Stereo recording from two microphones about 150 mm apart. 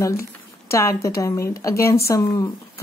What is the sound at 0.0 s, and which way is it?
Speech, 20° left (ahead or behind).